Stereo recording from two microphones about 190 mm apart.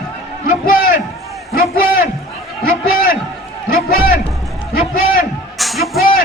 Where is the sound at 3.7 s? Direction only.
50° left (ahead or behind).